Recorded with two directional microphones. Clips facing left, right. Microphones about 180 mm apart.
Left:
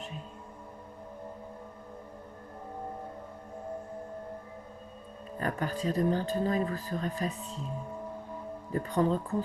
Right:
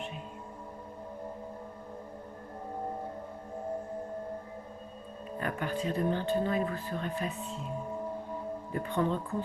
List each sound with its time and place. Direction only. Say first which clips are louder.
5.4 s speech: left 1 dB; 40° left (ahead or behind)
8.7 s speech: left 3 dB; 40° left (ahead or behind)